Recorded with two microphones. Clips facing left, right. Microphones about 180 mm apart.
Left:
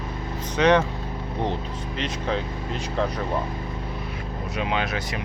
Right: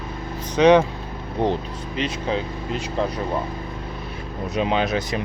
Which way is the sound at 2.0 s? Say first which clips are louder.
Right 3 dB; 10° right (ahead or behind).